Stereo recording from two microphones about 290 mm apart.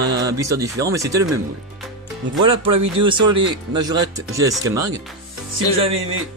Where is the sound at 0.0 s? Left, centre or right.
Centre.